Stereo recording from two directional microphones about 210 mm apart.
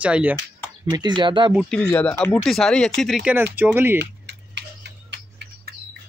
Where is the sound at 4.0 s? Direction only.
55° right (ahead or behind).